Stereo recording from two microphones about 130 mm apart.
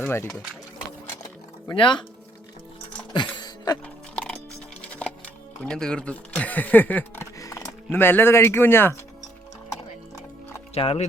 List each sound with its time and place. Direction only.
0.0 s speech: 20° left (ahead or behind)
0.3 s speech: 5° left (ahead or behind)
1.7 s speech: 40° left (ahead or behind)
3.1 s music: 35° left (ahead or behind)
3.8 s music: 10° left (ahead or behind)
5.6 s speech: 5° left (ahead or behind)
7.3 s music: 25° left (ahead or behind)
7.9 s speech: 15° left (ahead or behind)
10.8 s speech: 50° left (ahead or behind)